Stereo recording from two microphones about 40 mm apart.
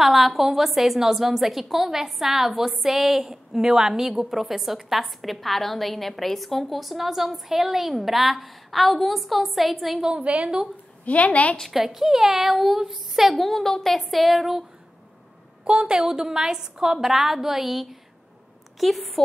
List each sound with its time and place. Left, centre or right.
0.0 s a woman's voice: centre
10.1 s a woman's voice: right
11.1 s a woman's voice: left
11.7 s a woman's voice: centre
15.6 s a woman's voice: right
16.1 s a woman's voice: centre